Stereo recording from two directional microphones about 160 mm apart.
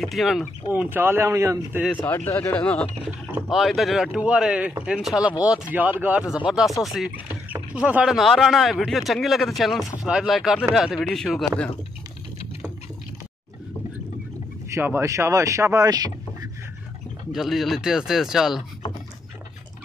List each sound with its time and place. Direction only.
0.0 s speech: centre (ahead or behind)
0.7 s speech: 15° right (ahead or behind)
2.0 s speech: 15° left (ahead or behind)
3.1 s speech: 10° right (ahead or behind)
3.5 s speech: centre (ahead or behind)
14.7 s speech: 15° right (ahead or behind)
17.3 s speech: centre (ahead or behind)